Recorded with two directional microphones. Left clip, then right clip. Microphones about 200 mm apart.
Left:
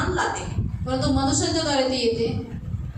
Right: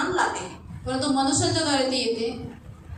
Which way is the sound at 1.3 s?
45° right (ahead or behind).